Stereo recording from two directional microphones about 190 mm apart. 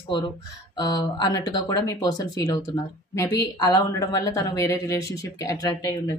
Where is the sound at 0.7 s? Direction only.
20° left (ahead or behind).